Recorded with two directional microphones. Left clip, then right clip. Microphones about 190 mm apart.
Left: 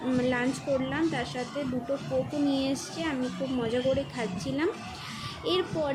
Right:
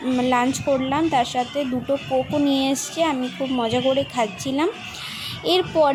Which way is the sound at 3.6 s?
40° right (ahead or behind).